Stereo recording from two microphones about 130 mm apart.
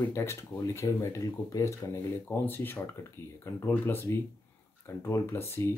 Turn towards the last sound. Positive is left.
turn(degrees=20)  # may be behind; listen again after turning